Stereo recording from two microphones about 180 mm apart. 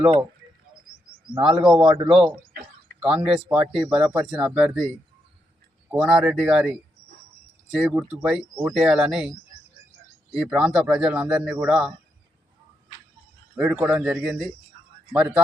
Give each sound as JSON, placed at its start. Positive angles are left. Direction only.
{"t": 1.4, "sound": "speech", "side_deg": -30}
{"t": 3.2, "sound": "speech", "side_deg": -5}
{"t": 5.9, "sound": "speech", "side_deg": -5}
{"t": 10.3, "sound": "speech", "side_deg": -5}
{"t": 13.6, "sound": "speech", "side_deg": -5}